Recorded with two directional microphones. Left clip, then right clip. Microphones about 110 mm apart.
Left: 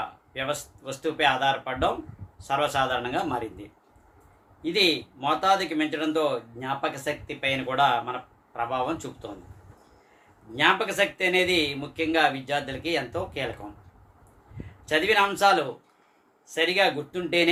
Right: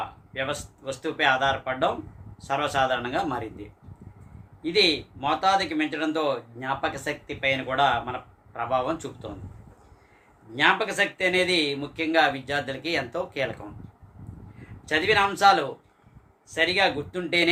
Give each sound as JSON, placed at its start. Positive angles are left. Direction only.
{"t": 0.3, "sound": "speech", "side_deg": -25}
{"t": 4.6, "sound": "speech", "side_deg": -20}
{"t": 10.5, "sound": "speech", "side_deg": -25}
{"t": 14.8, "sound": "speech", "side_deg": -25}